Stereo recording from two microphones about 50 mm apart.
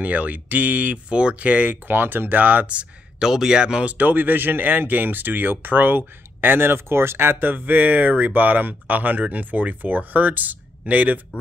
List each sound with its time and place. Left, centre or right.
0.0 s speech: right
3.2 s speech: centre
4.0 s speech: right